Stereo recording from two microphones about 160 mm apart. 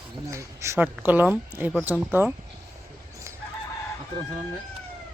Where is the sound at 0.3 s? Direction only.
20° right (ahead or behind).